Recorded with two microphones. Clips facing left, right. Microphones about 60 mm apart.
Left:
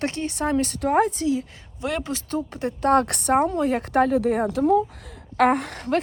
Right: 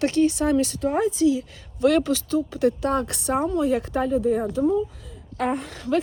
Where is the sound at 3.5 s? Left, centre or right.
Left.